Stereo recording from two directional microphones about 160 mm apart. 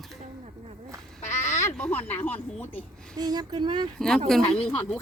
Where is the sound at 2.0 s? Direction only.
40° left (ahead or behind).